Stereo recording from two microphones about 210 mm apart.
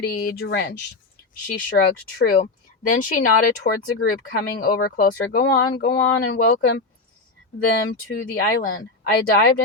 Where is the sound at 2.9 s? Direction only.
40° left (ahead or behind).